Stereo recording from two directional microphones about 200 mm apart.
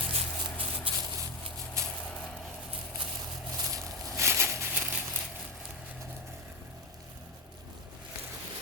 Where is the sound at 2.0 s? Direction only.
Centre (ahead or behind).